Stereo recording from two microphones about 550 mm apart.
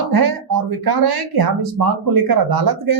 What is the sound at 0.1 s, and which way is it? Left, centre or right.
A woman's voice, right.